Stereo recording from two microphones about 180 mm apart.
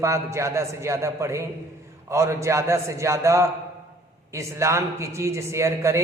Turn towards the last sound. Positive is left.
turn(degrees=-15)  # may be behind; listen again after turning